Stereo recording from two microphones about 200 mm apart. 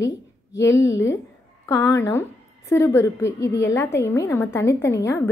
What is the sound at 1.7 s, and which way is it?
A woman's voice, 15° left (ahead or behind).